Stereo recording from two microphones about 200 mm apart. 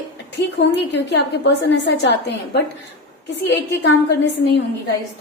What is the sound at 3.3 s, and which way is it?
A woman's voice, 60° left (ahead or behind).